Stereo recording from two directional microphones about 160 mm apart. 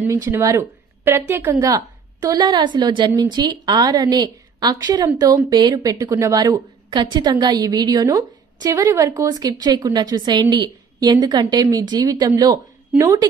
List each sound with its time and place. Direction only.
0.0 s a woman's voice: 15° right (ahead or behind)